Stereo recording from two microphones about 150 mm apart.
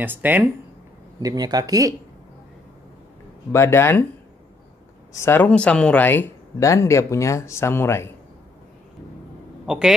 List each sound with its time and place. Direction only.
0.0 s speech: 10° right (ahead or behind)
1.2 s speech: 25° right (ahead or behind)
3.5 s speech: 15° left (ahead or behind)
5.1 s speech: 15° left (ahead or behind)
9.7 s speech: 5° right (ahead or behind)